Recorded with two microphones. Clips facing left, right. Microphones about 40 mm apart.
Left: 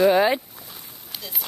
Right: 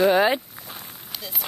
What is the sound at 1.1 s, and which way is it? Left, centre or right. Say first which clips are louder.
Run: even; centre.